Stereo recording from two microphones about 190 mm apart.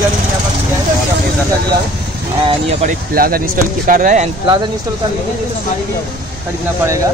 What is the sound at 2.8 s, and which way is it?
Speech, 50° right (ahead or behind).